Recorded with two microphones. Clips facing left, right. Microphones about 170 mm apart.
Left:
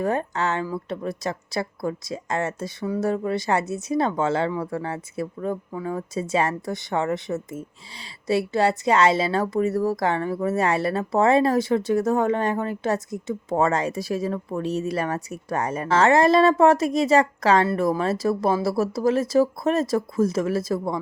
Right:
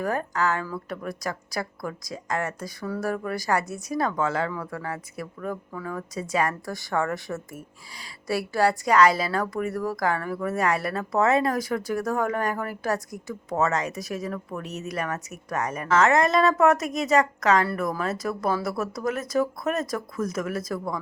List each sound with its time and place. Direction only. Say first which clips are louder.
0.0 s a woman's voice: left 2 dB; 25° left (ahead or behind)